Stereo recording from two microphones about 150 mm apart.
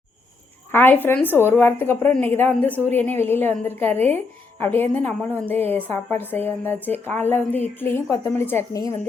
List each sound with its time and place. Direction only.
0.7 s a woman's voice: 15° left (ahead or behind)